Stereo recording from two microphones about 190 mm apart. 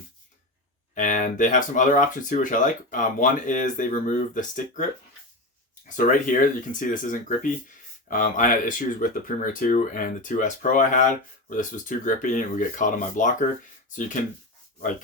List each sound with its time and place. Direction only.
0.9 s speech: 45° left (ahead or behind)